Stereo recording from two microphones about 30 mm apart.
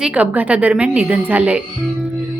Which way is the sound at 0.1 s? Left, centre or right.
Right.